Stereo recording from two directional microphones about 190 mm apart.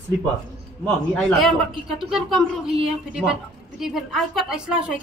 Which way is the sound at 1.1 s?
Centre (ahead or behind).